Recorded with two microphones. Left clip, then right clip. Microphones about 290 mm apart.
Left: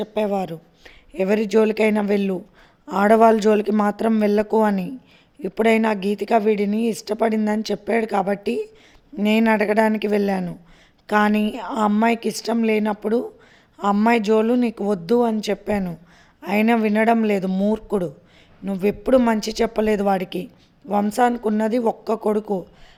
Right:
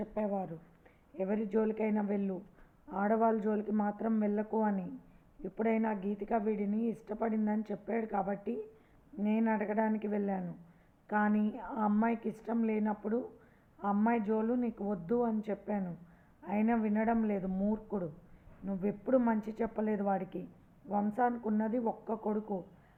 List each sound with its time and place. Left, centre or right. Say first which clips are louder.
0.0 s a woman's voice: left 14 dB; left